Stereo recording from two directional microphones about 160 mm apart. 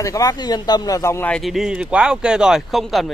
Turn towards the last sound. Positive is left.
turn(degrees=0)  # may be behind; listen again after turning